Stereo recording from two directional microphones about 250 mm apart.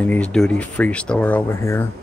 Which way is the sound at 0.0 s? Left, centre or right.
Centre.